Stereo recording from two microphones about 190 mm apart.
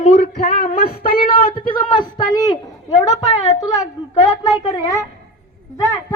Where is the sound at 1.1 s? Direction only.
50° left (ahead or behind).